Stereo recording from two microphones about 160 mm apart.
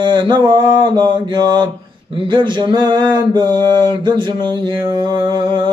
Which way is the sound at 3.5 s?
15° left (ahead or behind).